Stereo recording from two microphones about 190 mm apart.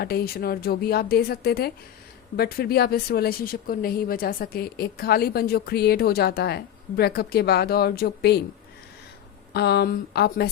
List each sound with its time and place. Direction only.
0.0 s a woman's voice: 55° left (ahead or behind)
9.5 s speech: 60° left (ahead or behind)